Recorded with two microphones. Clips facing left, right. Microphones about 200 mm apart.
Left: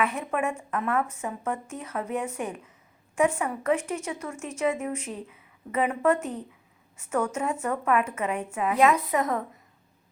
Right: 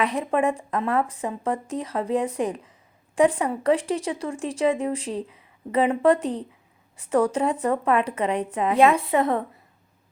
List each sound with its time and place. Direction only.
0.0 s a woman's voice: 35° right (ahead or behind)